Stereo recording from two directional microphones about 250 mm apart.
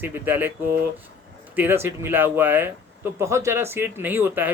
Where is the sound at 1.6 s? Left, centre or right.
Centre.